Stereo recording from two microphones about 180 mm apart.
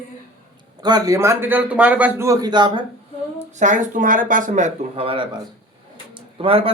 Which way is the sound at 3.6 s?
45° right (ahead or behind).